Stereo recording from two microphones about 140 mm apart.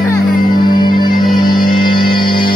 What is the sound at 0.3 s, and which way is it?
Music, 90° left.